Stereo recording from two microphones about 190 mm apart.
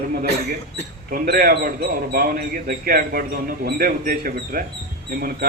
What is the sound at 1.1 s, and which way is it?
Speech, 50° right (ahead or behind).